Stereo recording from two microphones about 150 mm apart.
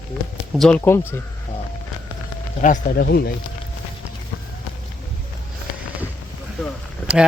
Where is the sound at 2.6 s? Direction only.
60° left (ahead or behind); by 3.3 s 90° left.